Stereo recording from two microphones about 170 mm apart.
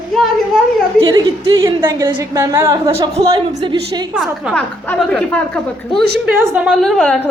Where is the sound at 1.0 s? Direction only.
20° right (ahead or behind).